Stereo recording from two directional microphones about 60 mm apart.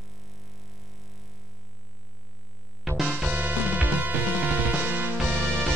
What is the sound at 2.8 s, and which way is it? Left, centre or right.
Music, centre.